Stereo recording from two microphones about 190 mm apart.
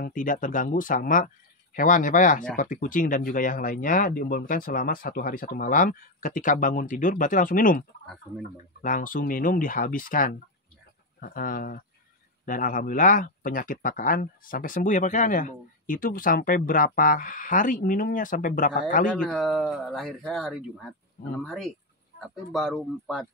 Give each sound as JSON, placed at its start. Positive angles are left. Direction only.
{"t": 0.0, "sound": "speech", "side_deg": 45}
{"t": 8.8, "sound": "speech", "side_deg": 45}
{"t": 19.0, "sound": "speech", "side_deg": 5}
{"t": 22.2, "sound": "speech", "side_deg": 0}